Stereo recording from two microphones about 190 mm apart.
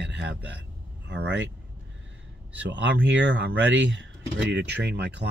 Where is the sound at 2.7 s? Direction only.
70° right (ahead or behind).